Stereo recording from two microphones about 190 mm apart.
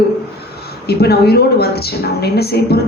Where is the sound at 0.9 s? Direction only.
55° left (ahead or behind).